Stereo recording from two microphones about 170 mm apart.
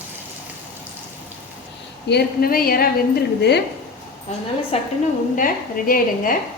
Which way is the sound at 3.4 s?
80° left.